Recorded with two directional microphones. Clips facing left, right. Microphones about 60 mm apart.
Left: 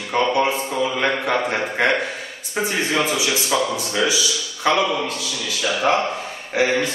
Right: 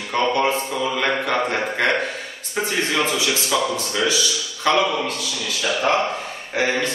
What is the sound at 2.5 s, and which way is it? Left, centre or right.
A man's voice, centre.